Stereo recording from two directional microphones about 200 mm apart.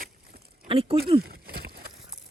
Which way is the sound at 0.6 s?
30° right (ahead or behind).